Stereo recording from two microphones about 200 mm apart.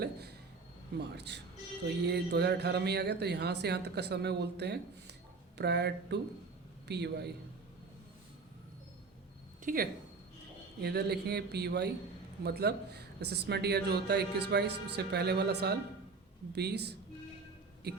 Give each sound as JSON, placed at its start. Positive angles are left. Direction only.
{"t": 0.0, "sound": "a man's voice", "side_deg": -55}
{"t": 9.6, "sound": "speech", "side_deg": -45}